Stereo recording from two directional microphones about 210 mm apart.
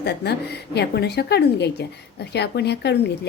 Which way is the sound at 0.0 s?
50° left (ahead or behind).